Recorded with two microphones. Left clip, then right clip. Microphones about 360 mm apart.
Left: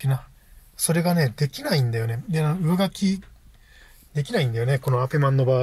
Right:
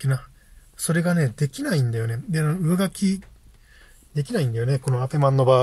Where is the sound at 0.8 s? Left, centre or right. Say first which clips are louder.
Left 1 dB; left.